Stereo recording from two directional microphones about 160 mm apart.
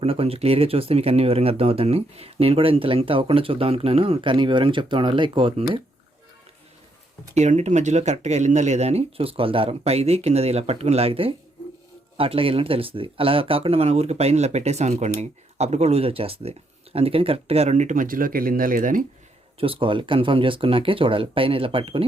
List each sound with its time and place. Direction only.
0.0 s speech: 35° right (ahead or behind)
7.3 s speech: 45° right (ahead or behind)
19.5 s speech: 35° right (ahead or behind)